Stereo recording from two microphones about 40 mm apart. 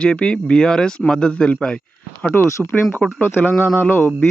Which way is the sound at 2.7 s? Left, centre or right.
Left.